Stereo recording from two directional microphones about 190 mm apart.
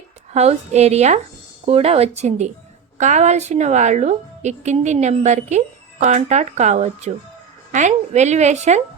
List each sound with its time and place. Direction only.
0.3 s a woman's voice: 35° right (ahead or behind)